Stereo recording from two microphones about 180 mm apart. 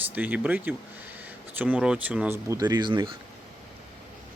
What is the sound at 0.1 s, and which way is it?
Speech, 10° right (ahead or behind).